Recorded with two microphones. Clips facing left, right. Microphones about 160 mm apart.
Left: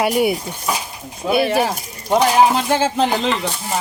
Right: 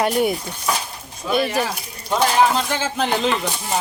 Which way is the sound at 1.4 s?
55° left (ahead or behind).